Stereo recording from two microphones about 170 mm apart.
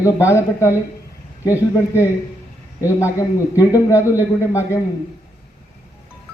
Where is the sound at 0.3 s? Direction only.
15° left (ahead or behind).